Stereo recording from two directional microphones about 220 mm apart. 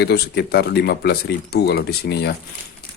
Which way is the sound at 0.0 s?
45° left (ahead or behind).